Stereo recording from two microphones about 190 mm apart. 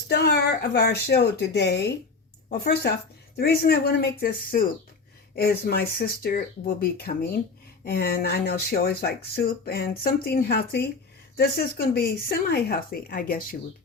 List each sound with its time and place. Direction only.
0.1 s speech: 60° left (ahead or behind)